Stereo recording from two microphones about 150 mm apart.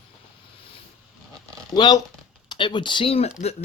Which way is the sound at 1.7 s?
30° left (ahead or behind).